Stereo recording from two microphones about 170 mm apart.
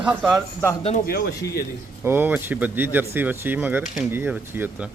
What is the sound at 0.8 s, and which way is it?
Speech, 35° left (ahead or behind).